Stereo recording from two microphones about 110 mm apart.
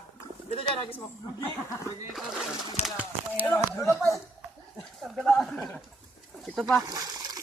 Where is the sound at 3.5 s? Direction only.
25° left (ahead or behind).